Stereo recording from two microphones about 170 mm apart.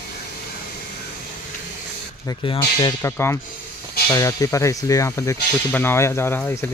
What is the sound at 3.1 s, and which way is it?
Speech, 15° left (ahead or behind).